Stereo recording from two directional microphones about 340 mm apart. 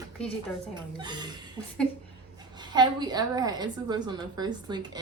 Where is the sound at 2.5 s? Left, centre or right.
Centre.